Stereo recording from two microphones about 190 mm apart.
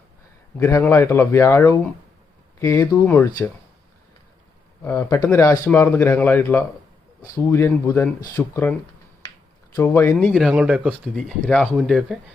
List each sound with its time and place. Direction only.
0.6 s speech: 15° left (ahead or behind)
4.8 s speech: 10° left (ahead or behind)
9.7 s speech: 15° left (ahead or behind)
10.3 s speech: 5° right (ahead or behind)